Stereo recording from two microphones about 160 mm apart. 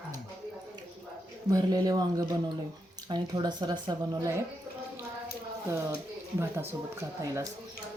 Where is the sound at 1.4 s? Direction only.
25° right (ahead or behind).